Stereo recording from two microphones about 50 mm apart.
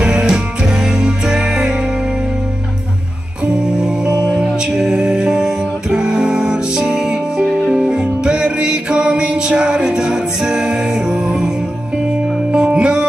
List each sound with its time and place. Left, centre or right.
0.0 s music: centre
3.8 s music: centre
12.5 s music: right